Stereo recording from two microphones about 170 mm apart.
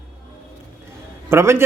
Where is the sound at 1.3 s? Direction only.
15° right (ahead or behind).